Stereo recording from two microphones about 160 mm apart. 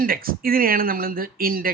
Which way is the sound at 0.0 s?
65° right (ahead or behind).